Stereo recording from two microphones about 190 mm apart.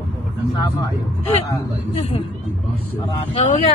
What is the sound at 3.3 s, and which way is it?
Speech, 30° left (ahead or behind).